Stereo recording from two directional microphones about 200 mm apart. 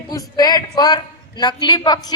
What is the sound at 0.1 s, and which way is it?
A man's voice, 20° left (ahead or behind).